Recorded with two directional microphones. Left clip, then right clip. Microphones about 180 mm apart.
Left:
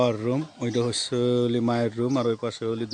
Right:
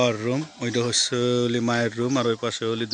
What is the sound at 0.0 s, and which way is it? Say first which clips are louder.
Speech: right 1 dB; 10° left (ahead or behind).